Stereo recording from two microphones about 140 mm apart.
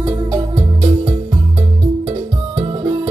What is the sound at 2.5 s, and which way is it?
Music, 35° right (ahead or behind).